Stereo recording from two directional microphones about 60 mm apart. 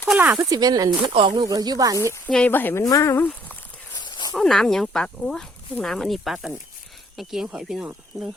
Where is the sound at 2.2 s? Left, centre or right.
Centre.